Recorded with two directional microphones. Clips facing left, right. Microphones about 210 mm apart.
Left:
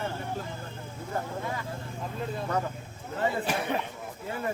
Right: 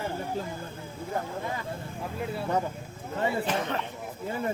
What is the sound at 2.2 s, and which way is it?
Speech, 10° right (ahead or behind).